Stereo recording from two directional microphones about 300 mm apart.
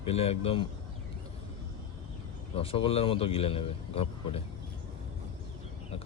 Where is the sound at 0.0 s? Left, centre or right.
Centre.